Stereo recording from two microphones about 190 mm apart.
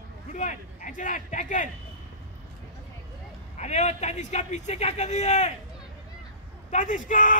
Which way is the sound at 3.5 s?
35° left (ahead or behind).